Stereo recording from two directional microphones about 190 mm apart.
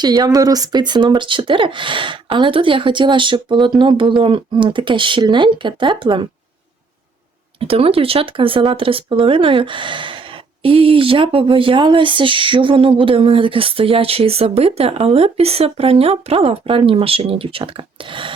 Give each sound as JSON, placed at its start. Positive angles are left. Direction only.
{"t": 0.0, "sound": "speech", "side_deg": -20}
{"t": 7.6, "sound": "speech", "side_deg": -30}